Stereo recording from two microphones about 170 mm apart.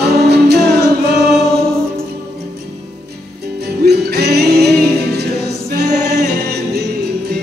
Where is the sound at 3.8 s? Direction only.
70° right (ahead or behind).